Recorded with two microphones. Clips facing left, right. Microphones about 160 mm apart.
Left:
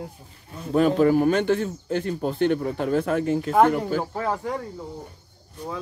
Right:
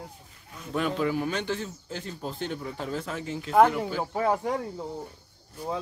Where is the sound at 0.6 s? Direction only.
35° left (ahead or behind); by 3.5 s 55° left (ahead or behind).